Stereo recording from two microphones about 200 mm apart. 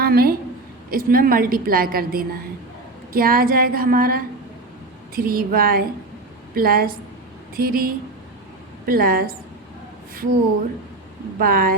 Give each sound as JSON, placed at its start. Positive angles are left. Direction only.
{"t": 0.0, "sound": "a woman's voice", "side_deg": -50}
{"t": 11.3, "sound": "a woman's voice", "side_deg": -45}